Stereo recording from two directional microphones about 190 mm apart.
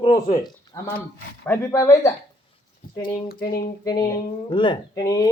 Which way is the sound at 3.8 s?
20° left (ahead or behind).